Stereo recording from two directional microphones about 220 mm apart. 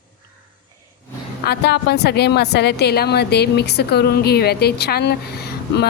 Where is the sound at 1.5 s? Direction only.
50° left (ahead or behind).